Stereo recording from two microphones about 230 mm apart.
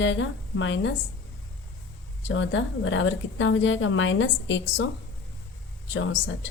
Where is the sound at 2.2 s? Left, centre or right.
Left.